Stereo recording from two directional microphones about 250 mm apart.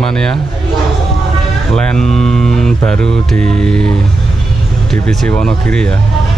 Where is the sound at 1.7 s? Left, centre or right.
Centre.